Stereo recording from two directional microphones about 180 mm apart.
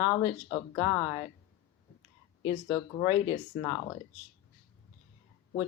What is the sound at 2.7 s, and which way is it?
Speech, 30° left (ahead or behind).